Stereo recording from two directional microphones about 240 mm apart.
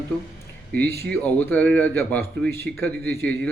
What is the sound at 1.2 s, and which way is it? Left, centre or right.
A man's voice, centre.